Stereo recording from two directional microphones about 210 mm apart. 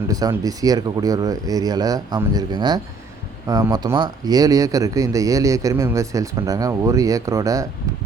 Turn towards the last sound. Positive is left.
turn(degrees=-15)  # may be behind; listen again after turning